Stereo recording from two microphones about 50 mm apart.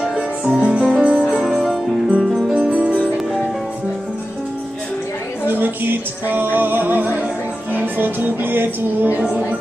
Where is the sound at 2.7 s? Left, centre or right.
Right.